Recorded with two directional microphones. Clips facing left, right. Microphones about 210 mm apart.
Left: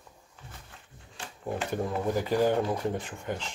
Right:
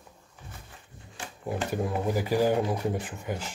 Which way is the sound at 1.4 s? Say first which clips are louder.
Right 1 dB; 5° right (ahead or behind).